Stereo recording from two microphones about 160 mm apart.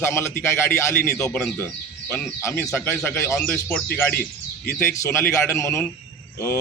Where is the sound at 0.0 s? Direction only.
15° left (ahead or behind).